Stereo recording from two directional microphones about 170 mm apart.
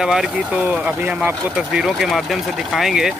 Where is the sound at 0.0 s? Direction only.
5° right (ahead or behind).